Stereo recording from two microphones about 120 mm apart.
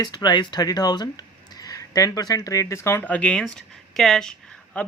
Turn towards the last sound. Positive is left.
turn(degrees=10)  # may be behind; listen again after turning